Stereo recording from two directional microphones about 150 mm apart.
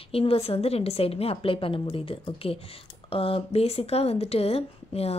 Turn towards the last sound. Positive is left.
turn(degrees=40)  # may be behind; listen again after turning